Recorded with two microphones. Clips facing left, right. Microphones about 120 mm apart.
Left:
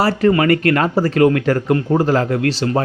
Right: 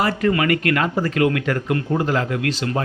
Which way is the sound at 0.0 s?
35° left (ahead or behind).